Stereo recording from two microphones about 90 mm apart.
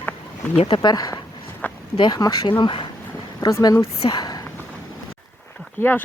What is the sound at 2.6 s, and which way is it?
Speech, 60° left (ahead or behind).